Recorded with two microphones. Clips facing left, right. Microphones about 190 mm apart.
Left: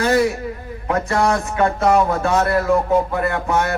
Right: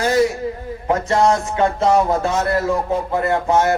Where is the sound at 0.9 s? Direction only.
25° right (ahead or behind).